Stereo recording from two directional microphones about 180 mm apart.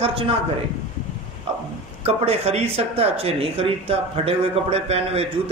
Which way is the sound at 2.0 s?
35° right (ahead or behind).